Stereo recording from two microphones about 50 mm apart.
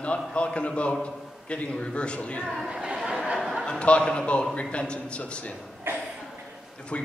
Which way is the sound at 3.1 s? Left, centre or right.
Centre.